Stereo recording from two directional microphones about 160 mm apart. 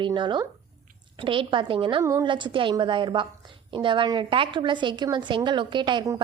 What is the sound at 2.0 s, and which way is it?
A woman's voice, 20° right (ahead or behind).